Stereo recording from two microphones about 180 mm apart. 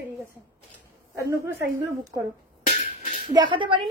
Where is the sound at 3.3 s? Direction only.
25° right (ahead or behind).